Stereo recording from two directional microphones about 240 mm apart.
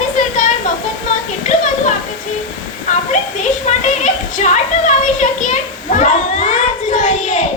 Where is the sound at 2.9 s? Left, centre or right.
Left.